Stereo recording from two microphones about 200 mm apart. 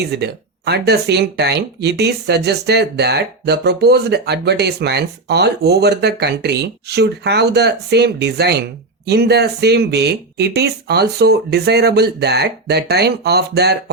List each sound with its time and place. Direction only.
0.1 s speech: 55° right (ahead or behind)